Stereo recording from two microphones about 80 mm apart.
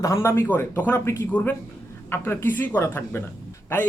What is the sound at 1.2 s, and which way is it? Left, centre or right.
A man's voice, centre.